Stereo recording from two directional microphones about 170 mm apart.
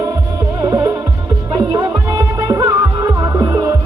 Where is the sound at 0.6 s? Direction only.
20° right (ahead or behind).